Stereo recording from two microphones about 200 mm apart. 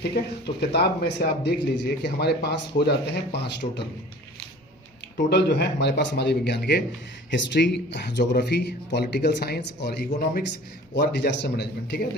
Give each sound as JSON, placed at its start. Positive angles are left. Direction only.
{"t": 0.0, "sound": "a man's voice", "side_deg": 55}
{"t": 5.3, "sound": "a man's voice", "side_deg": 55}
{"t": 10.1, "sound": "a man's voice", "side_deg": 45}
{"t": 10.9, "sound": "a man's voice", "side_deg": 55}